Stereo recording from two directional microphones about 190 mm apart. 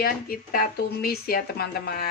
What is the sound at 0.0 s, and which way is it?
Speech, 50° left (ahead or behind).